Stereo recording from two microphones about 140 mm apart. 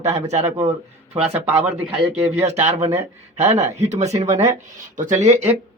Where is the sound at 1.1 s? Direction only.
15° right (ahead or behind).